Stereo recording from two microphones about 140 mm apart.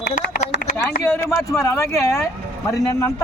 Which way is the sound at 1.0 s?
20° left (ahead or behind).